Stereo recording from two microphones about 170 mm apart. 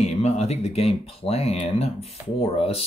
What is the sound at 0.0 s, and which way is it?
Speech, 40° left (ahead or behind).